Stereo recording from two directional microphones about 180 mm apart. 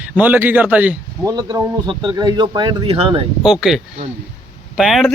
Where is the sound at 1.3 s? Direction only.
20° right (ahead or behind).